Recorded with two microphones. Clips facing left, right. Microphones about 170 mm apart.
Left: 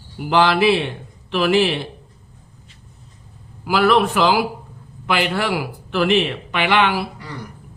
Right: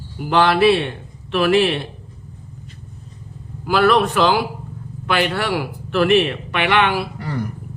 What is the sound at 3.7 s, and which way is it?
A man's voice, 10° left (ahead or behind).